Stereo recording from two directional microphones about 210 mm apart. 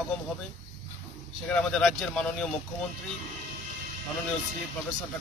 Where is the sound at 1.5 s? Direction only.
5° left (ahead or behind).